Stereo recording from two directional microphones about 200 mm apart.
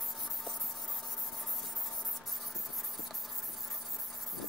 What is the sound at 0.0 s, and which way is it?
Spray, centre (ahead or behind).